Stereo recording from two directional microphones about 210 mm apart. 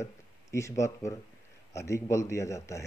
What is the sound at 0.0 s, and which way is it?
A man's voice, 15° left (ahead or behind).